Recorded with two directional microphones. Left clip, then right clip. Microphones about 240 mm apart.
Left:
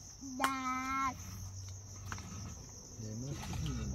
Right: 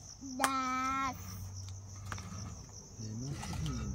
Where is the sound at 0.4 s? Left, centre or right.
Right.